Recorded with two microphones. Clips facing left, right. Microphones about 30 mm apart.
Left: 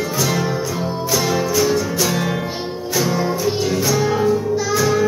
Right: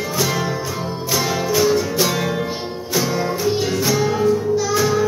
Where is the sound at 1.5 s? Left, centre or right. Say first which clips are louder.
Right 1 dB; centre.